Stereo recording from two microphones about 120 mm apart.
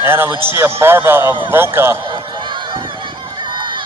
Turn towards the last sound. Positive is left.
turn(degrees=-40)  # may be behind; listen again after turning